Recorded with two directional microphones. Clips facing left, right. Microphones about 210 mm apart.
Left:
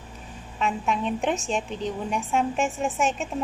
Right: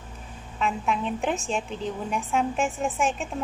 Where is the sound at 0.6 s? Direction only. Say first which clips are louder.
Left 1 dB; centre (ahead or behind).